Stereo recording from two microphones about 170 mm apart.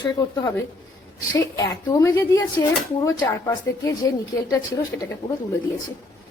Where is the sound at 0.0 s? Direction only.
20° left (ahead or behind).